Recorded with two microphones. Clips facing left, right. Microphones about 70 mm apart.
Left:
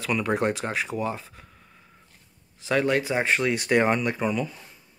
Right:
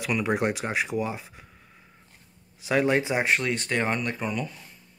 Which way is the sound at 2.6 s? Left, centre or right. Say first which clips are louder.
Even; centre.